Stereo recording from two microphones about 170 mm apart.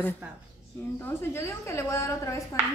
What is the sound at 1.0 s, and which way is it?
A woman's voice, 15° left (ahead or behind).